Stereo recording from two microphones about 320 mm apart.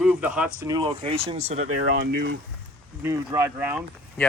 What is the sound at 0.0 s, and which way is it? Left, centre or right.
Speech, centre.